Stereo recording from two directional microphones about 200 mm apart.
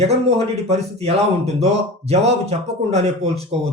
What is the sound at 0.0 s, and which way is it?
Speech, 30° right (ahead or behind).